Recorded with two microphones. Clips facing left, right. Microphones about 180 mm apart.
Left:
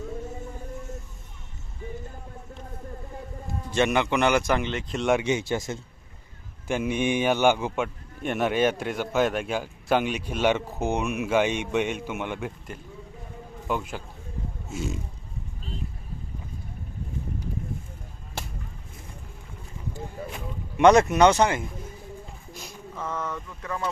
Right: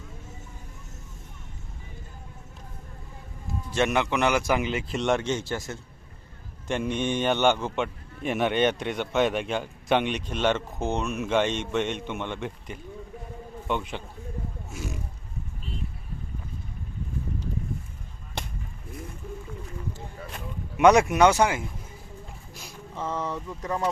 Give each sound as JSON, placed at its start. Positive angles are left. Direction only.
{"t": 3.7, "sound": "a man's voice", "side_deg": 0}
{"t": 6.7, "sound": "a man's voice", "side_deg": 5}
{"t": 14.7, "sound": "a sound", "side_deg": 25}
{"t": 20.7, "sound": "speech", "side_deg": -10}
{"t": 23.0, "sound": "speech", "side_deg": -30}